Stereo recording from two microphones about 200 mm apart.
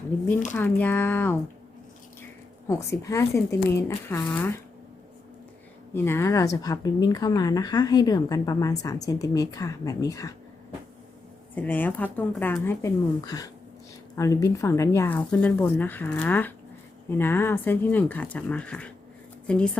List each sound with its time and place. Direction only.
0.5 s speech: 10° left (ahead or behind)
2.6 s speech: 15° left (ahead or behind)
5.9 s speech: 15° left (ahead or behind)
11.5 s speech: 10° left (ahead or behind)